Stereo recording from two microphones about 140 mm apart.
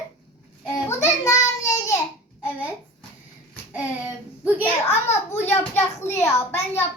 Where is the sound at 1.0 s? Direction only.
20° left (ahead or behind).